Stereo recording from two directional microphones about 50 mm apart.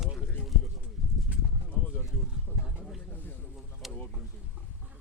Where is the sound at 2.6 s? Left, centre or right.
Centre.